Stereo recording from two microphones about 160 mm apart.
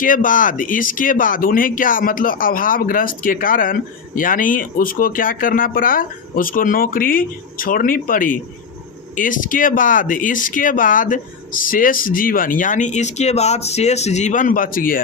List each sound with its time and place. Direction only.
0.0 s speech: 55° left (ahead or behind)